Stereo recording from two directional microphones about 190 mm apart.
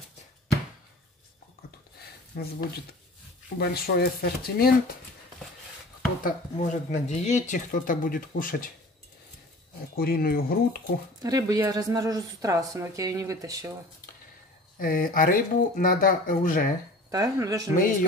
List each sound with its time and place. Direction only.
2.3 s speech: 50° left (ahead or behind)
3.5 s speech: 55° left (ahead or behind)
6.2 s speech: 40° left (ahead or behind)
9.9 s speech: 50° left (ahead or behind)
11.2 s a woman's voice: 20° right (ahead or behind)
14.8 s speech: 45° left (ahead or behind)
17.1 s speech: 20° right (ahead or behind)